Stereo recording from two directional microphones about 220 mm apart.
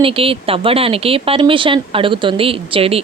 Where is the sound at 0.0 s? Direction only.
25° right (ahead or behind).